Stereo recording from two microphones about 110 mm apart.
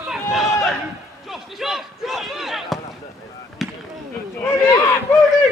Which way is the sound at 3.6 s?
Centre (ahead or behind).